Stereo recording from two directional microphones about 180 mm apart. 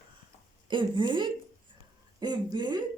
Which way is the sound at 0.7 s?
25° right (ahead or behind).